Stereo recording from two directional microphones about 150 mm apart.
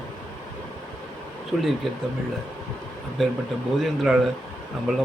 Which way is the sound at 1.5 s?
Centre (ahead or behind).